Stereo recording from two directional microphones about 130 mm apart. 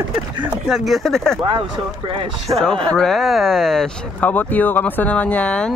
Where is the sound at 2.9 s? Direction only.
5° left (ahead or behind).